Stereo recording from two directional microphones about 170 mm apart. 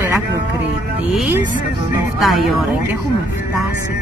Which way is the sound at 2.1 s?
Centre (ahead or behind).